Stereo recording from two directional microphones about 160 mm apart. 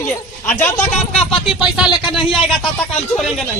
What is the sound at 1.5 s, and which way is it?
Speech, 5° right (ahead or behind).